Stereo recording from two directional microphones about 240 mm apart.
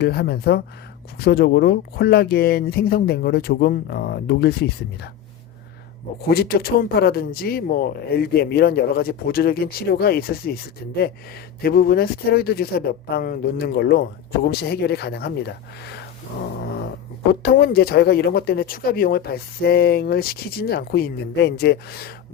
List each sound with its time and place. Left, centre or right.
0.0 s speech: left
6.2 s speech: left
17.4 s speech: left